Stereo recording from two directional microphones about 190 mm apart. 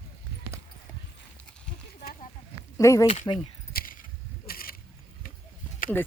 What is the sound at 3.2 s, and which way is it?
Speech, 25° left (ahead or behind).